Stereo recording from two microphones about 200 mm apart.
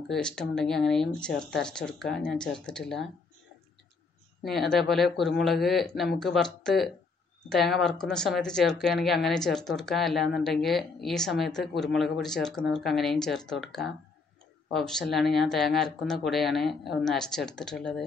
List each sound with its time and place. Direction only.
0.1 s speech: 5° left (ahead or behind)
4.4 s speech: centre (ahead or behind)
14.7 s speech: centre (ahead or behind)